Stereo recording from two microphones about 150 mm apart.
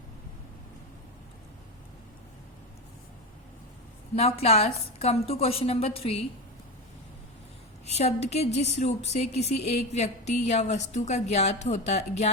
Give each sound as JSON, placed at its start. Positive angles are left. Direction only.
{"t": 4.1, "sound": "a woman's voice", "side_deg": 45}
{"t": 7.9, "sound": "a woman's voice", "side_deg": 45}